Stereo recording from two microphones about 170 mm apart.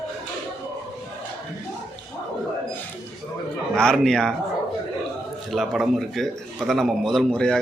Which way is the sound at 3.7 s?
5° left (ahead or behind).